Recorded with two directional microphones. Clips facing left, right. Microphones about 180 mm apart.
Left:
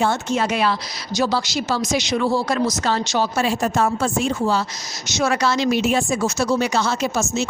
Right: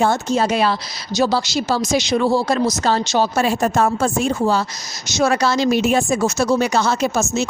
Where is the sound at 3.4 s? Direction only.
50° right (ahead or behind).